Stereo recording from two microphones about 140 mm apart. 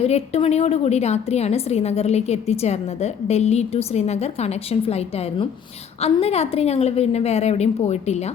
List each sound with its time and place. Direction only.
0.0 s a woman's voice: 45° left (ahead or behind)